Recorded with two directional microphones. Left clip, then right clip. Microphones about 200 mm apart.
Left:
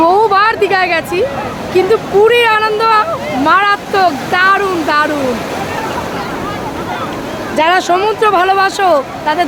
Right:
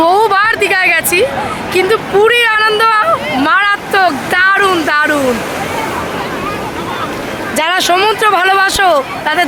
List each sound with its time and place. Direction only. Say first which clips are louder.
0.0 s a sound: even; centre (ahead or behind)
1.7 s speech: left 1 dB; centre (ahead or behind)
7.5 s speech: left 1 dB; centre (ahead or behind)